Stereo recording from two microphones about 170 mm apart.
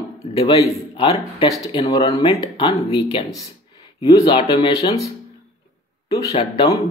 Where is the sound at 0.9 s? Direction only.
35° left (ahead or behind).